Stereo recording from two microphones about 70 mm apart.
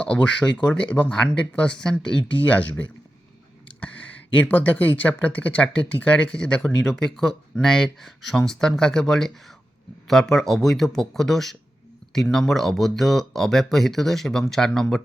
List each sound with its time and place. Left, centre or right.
0.0 s speech: centre
6.8 s speech: centre